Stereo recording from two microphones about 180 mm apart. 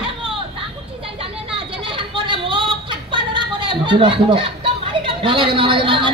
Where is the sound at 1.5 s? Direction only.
30° right (ahead or behind).